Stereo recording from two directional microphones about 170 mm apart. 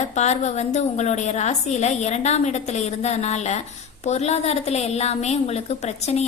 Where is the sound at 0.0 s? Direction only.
40° left (ahead or behind).